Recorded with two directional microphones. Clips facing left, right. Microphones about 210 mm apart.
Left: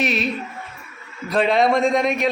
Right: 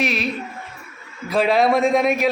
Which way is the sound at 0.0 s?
Centre (ahead or behind).